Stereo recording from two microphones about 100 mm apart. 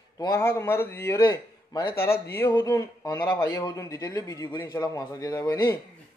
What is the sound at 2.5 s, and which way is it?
Speech, 40° left (ahead or behind).